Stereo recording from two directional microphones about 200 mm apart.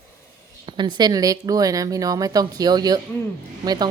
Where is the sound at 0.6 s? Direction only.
20° right (ahead or behind).